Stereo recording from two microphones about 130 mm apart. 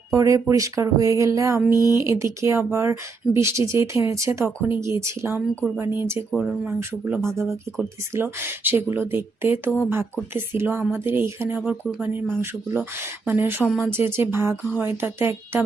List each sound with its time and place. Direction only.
0.1 s speech: 25° right (ahead or behind)
1.7 s speech: 30° left (ahead or behind)
2.0 s speech: 20° right (ahead or behind)
6.3 s speech: 5° right (ahead or behind)
7.0 s speech: 20° right (ahead or behind)